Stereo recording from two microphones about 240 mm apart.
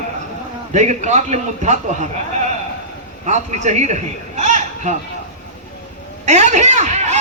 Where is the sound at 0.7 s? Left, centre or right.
Right.